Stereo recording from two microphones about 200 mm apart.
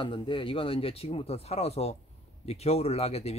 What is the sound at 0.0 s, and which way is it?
Speech, 25° left (ahead or behind).